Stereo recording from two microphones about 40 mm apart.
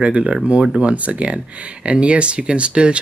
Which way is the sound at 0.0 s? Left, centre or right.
Right.